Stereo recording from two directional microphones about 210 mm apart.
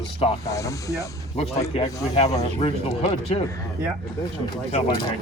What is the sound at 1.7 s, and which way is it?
Speech, 30° left (ahead or behind).